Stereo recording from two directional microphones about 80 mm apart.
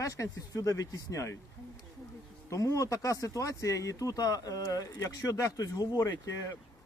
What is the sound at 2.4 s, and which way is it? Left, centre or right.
Speech, left.